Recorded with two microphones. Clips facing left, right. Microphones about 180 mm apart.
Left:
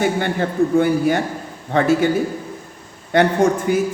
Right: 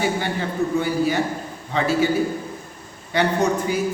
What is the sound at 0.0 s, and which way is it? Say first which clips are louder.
A man's voice: left 4 dB; 55° left (ahead or behind).